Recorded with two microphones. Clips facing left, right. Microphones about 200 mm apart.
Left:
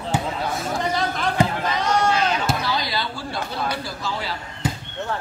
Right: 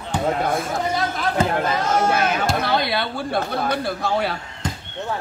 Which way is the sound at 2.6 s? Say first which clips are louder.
Right 4 dB; 60° right (ahead or behind).